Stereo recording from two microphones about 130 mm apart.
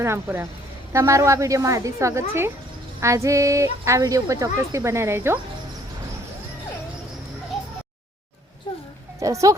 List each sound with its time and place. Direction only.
0.0 s speech: 20° right (ahead or behind)
9.2 s speech: 25° right (ahead or behind)